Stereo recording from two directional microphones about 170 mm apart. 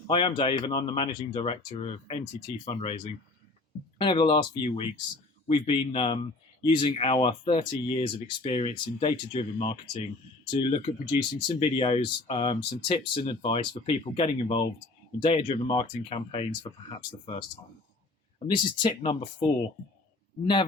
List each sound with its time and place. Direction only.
0.1 s speech: 30° left (ahead or behind)
18.4 s speech: 30° left (ahead or behind)